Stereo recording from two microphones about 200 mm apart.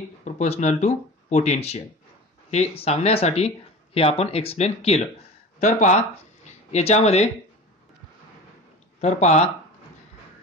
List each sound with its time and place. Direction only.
0.2 s speech: 35° left (ahead or behind)
9.0 s speech: 35° left (ahead or behind)